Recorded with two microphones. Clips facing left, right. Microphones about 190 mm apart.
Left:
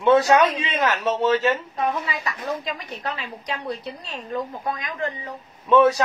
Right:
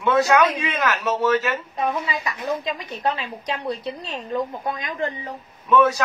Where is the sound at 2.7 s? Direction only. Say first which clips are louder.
Right 5 dB; 20° right (ahead or behind).